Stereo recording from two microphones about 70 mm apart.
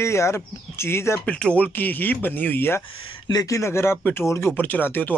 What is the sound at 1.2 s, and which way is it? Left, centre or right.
Speech, left.